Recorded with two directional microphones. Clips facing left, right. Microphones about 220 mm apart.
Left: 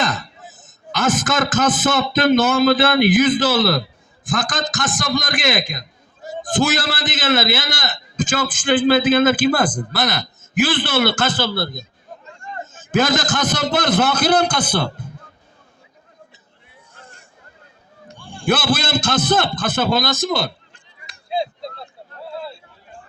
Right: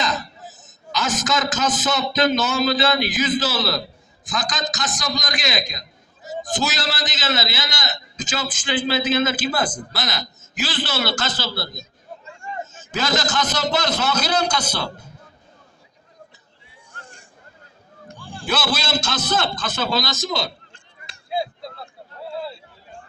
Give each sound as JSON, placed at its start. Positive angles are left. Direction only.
{"t": 0.0, "sound": "a man's voice", "side_deg": 55}
{"t": 18.2, "sound": "a sound", "side_deg": -5}
{"t": 18.4, "sound": "a man's voice", "side_deg": 55}
{"t": 21.2, "sound": "chop", "side_deg": 20}